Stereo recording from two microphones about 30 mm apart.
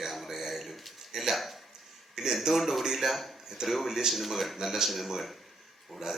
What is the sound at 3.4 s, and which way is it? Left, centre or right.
Speech, centre.